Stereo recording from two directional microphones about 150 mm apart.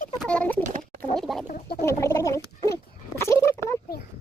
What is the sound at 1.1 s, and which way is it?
Chicken, centre (ahead or behind).